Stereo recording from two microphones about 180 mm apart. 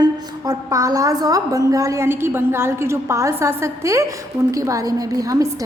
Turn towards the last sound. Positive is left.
turn(degrees=-20)  # may be behind; listen again after turning